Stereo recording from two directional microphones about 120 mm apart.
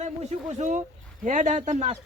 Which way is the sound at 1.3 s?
90° right.